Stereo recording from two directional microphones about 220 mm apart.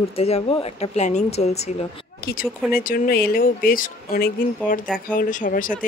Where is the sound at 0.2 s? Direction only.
25° left (ahead or behind).